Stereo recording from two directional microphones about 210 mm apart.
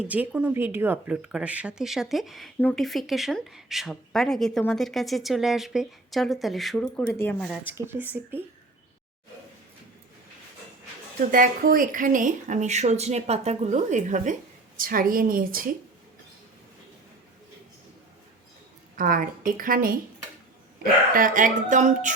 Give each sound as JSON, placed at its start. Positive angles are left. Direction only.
{"t": 0.0, "sound": "speech", "side_deg": -5}
{"t": 7.7, "sound": "speech", "side_deg": -10}
{"t": 11.3, "sound": "a woman's voice", "side_deg": -40}
{"t": 18.9, "sound": "speech", "side_deg": -40}
{"t": 21.1, "sound": "speech", "side_deg": -40}